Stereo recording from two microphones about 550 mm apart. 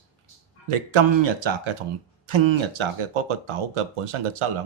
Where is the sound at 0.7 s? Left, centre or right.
Right.